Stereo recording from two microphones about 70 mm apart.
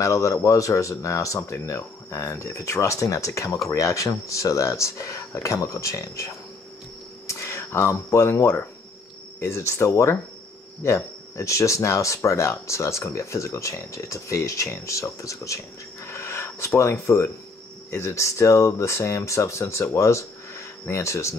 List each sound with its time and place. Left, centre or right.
0.0 s speech: left